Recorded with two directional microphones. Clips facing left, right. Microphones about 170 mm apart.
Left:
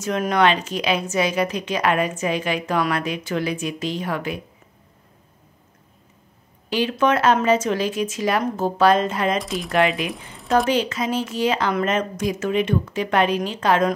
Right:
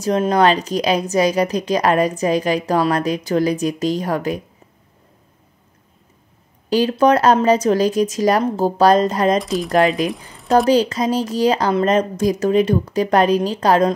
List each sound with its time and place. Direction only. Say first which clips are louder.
0.0 s a woman's voice: right 4 dB; 35° right (ahead or behind)
6.7 s a woman's voice: right 5 dB; 40° right (ahead or behind)
9.4 s speech: right 6 dB; centre (ahead or behind)
9.7 s a woman's voice: right 4 dB; 40° right (ahead or behind)